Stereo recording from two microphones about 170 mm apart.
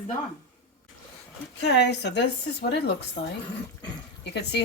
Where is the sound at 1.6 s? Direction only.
90° left.